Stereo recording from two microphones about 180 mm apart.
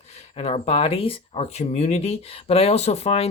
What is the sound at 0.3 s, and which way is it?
Speech, 35° left (ahead or behind).